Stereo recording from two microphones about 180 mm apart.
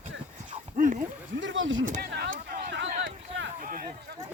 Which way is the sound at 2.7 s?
85° right.